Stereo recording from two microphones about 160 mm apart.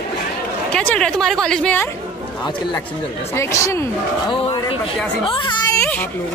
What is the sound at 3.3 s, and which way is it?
Speech, 20° left (ahead or behind).